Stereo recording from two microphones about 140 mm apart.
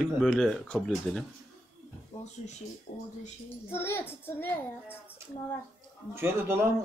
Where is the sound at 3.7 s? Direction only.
15° left (ahead or behind).